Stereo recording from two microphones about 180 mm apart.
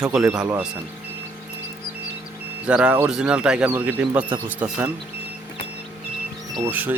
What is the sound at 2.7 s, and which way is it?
Speech, 5° right (ahead or behind).